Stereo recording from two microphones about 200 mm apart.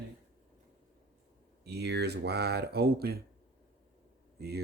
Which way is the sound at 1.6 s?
55° right (ahead or behind).